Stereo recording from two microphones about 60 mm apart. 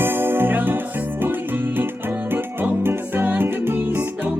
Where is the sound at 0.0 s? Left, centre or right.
Right.